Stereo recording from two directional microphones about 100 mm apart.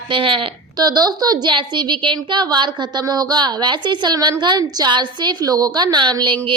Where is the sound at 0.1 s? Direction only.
60° right (ahead or behind).